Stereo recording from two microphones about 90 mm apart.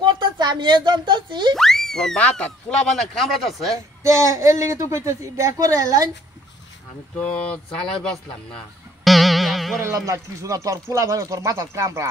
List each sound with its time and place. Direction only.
0.0 s speech: 55° right (ahead or behind)
1.5 s speech: 5° left (ahead or behind)
3.7 s speech: 35° right (ahead or behind)
7.2 s speech: 15° left (ahead or behind)
9.0 s music: centre (ahead or behind)
9.8 s speech: 35° right (ahead or behind)